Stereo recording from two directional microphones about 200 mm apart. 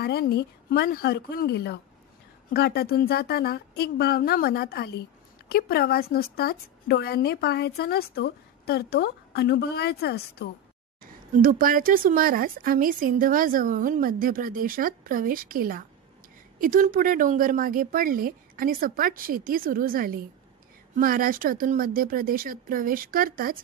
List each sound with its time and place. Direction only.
0.0 s a woman's voice: 50° left (ahead or behind)
11.0 s speech: 45° right (ahead or behind)